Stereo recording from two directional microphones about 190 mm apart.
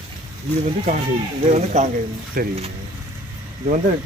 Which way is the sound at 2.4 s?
50° right (ahead or behind).